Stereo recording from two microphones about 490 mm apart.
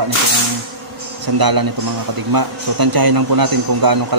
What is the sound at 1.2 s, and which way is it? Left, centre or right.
A man's voice, right.